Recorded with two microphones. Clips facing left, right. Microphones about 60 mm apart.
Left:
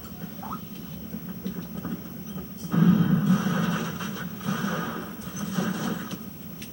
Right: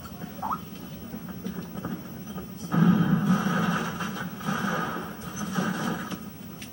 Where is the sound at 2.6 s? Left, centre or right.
Centre.